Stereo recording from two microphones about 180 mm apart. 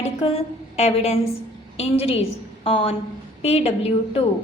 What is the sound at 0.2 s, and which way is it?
A woman's voice, 35° left (ahead or behind).